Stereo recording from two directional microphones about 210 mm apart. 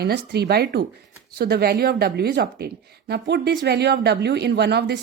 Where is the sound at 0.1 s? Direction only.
50° right (ahead or behind).